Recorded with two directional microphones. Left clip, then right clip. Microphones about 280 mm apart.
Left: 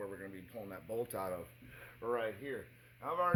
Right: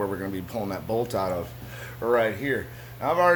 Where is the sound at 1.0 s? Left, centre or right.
Left.